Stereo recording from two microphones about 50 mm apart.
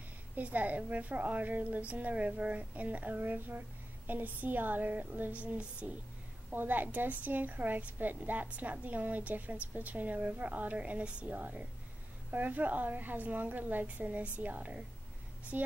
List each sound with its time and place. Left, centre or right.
0.4 s a woman's voice: right
6.5 s a woman's voice: right